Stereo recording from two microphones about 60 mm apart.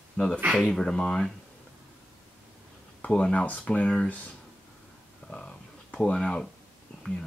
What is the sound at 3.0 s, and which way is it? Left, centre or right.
Speech, centre.